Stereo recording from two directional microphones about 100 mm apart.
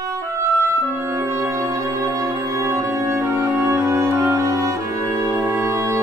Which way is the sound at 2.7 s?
25° right (ahead or behind).